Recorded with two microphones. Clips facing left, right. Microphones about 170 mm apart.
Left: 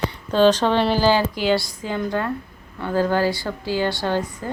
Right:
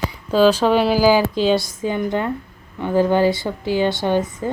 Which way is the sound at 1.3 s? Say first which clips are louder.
Right 3 dB; 20° right (ahead or behind).